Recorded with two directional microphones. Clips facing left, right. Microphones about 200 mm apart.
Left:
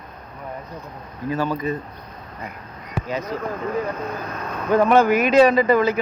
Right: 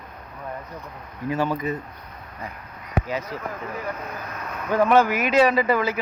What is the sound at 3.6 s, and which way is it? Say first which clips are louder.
Speech: left 6 dB; 35° left (ahead or behind).